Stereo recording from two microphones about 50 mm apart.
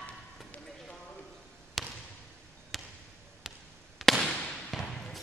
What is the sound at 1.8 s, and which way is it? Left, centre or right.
Basketball bounce, centre.